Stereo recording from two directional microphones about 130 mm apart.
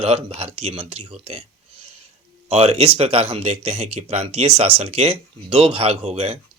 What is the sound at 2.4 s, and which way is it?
Speech, 55° right (ahead or behind).